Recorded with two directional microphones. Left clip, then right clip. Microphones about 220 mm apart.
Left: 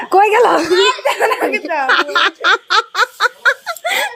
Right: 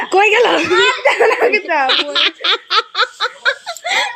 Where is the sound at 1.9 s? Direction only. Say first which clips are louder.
Left 2 dB; 5° left (ahead or behind).